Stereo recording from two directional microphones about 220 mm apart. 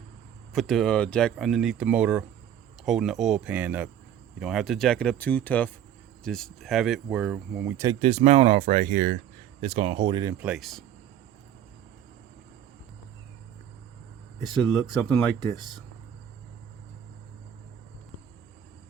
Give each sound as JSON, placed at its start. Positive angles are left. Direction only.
{"t": 0.5, "sound": "speech", "side_deg": 0}
{"t": 7.9, "sound": "speech", "side_deg": -30}
{"t": 15.1, "sound": "speech", "side_deg": 10}